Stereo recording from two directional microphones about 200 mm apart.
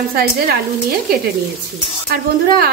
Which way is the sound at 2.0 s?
50° right (ahead or behind).